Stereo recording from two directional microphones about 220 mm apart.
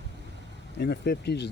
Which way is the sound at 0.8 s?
50° left (ahead or behind).